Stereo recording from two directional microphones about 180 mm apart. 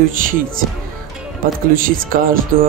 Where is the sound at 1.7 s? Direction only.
50° right (ahead or behind).